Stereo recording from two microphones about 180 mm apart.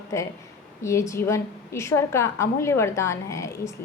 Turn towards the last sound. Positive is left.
turn(degrees=15)  # may be behind; listen again after turning